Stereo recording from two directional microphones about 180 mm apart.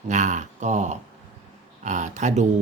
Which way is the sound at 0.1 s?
40° right (ahead or behind).